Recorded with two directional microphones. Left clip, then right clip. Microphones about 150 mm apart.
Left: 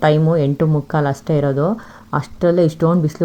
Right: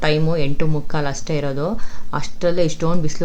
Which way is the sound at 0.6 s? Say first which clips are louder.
Left 5 dB; 15° left (ahead or behind).